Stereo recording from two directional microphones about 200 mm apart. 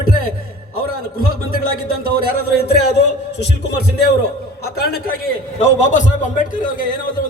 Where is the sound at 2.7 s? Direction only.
55° left (ahead or behind).